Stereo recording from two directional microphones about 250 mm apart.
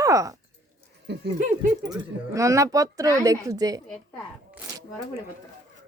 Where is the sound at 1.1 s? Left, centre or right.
Right.